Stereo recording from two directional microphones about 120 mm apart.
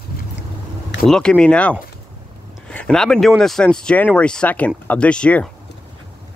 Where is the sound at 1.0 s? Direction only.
5° left (ahead or behind).